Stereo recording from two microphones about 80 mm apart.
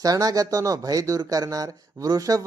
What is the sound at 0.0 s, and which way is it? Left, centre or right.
Speech, right.